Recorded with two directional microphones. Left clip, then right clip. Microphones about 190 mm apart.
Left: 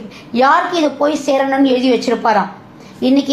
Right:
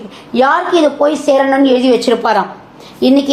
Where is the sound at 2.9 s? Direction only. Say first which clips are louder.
Right 4 dB; 25° right (ahead or behind).